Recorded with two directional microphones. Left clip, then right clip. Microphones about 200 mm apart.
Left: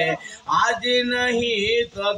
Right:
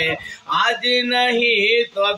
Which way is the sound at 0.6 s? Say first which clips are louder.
Right 3 dB; 15° left (ahead or behind).